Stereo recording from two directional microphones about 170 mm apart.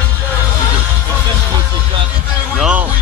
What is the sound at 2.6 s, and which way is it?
Speech, 5° right (ahead or behind).